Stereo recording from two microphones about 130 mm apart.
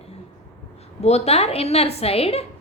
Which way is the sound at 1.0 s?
55° left (ahead or behind).